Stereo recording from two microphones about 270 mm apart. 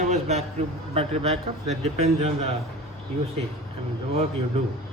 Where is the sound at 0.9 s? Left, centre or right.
Right.